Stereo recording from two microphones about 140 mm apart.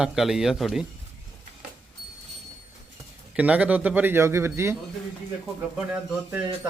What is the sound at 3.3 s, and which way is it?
Speech, 10° right (ahead or behind).